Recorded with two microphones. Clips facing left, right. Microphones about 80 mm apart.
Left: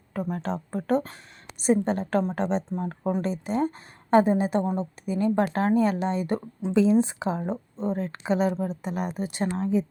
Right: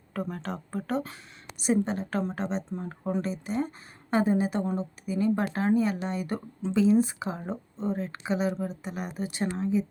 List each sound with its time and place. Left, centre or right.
0.1 s speech: centre
0.9 s a woman's voice: left
2.3 s a woman's voice: left
8.3 s a woman's voice: left
8.8 s a woman's voice: left